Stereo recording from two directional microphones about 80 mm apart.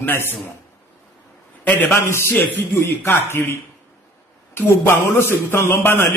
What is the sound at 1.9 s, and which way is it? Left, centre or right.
A man's voice, left.